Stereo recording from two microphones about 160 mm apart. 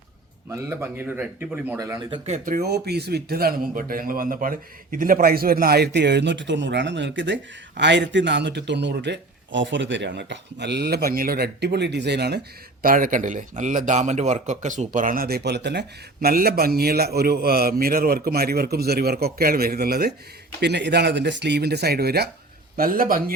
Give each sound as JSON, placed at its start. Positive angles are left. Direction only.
{"t": 0.5, "sound": "speech", "side_deg": -15}
{"t": 1.8, "sound": "speech", "side_deg": -20}
{"t": 2.0, "sound": "speech", "side_deg": -40}
{"t": 2.4, "sound": "a man's voice", "side_deg": -65}
{"t": 12.8, "sound": "a man's voice", "side_deg": -60}
{"t": 20.6, "sound": "speech", "side_deg": -90}
{"t": 22.8, "sound": "a man's voice", "side_deg": -60}